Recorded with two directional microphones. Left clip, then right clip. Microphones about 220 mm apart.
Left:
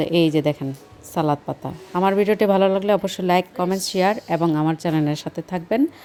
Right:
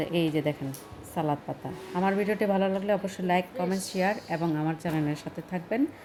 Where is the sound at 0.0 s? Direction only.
45° left (ahead or behind).